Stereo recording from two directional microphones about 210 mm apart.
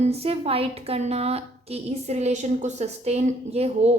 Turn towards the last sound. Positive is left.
turn(degrees=-30)  # may be behind; listen again after turning